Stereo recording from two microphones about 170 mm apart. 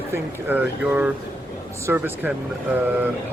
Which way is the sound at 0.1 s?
10° right (ahead or behind).